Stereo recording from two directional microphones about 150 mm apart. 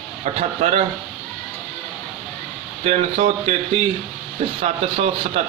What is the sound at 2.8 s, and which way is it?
A man's voice, 45° right (ahead or behind).